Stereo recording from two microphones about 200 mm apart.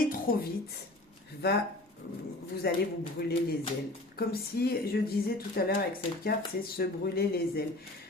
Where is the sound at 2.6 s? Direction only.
50° left (ahead or behind).